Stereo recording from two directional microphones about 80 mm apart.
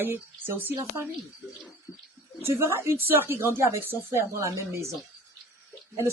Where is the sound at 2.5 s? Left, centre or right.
Right.